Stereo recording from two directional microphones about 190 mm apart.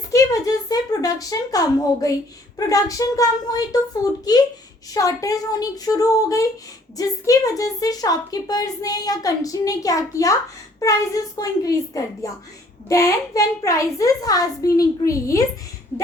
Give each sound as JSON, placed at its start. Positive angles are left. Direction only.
{"t": 0.1, "sound": "a woman's voice", "side_deg": 20}
{"t": 4.9, "sound": "a woman's voice", "side_deg": 15}